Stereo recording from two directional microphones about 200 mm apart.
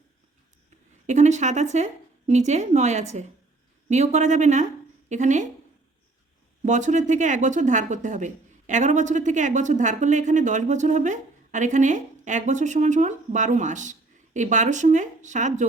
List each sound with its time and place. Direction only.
1.0 s a woman's voice: 35° right (ahead or behind)
6.6 s speech: 35° right (ahead or behind)